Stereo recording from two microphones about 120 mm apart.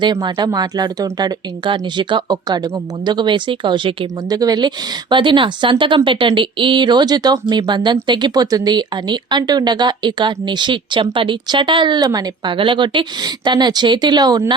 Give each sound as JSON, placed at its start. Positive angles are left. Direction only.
{"t": 0.0, "sound": "speech", "side_deg": -35}
{"t": 12.5, "sound": "speech", "side_deg": -45}